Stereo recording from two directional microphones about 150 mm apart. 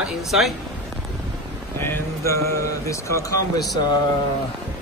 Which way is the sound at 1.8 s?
15° left (ahead or behind).